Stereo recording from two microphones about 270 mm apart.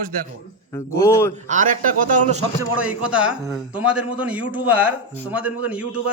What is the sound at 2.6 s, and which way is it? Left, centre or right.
Speech, centre.